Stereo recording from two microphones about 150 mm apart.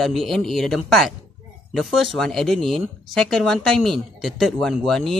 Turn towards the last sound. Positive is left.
turn(degrees=5)  # may be behind; listen again after turning